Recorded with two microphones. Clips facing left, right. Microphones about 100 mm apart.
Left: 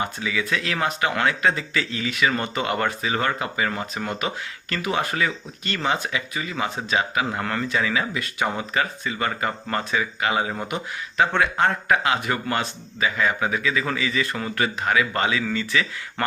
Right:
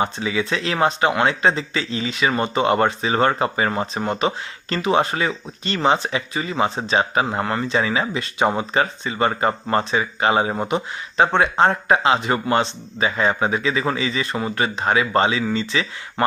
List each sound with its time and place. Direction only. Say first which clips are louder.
0.0 s speech: right 4 dB; 30° right (ahead or behind)